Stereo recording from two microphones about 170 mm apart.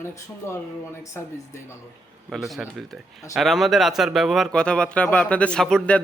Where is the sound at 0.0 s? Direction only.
15° left (ahead or behind).